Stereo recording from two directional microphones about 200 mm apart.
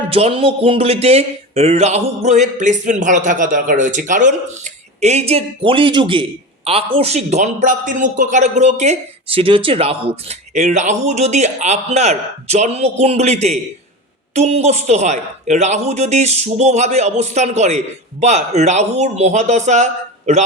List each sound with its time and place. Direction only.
0.1 s speech: 30° right (ahead or behind)